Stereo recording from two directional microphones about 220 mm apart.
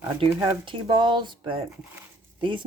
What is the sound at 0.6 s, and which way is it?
Speech, 20° right (ahead or behind).